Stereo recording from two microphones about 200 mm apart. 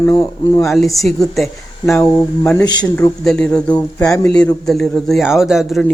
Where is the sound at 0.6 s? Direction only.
Centre (ahead or behind).